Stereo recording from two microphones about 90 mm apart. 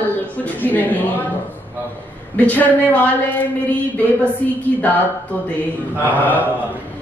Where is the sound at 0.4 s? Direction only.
20° left (ahead or behind).